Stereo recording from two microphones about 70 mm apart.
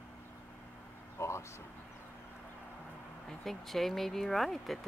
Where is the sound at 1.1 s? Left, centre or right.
Left.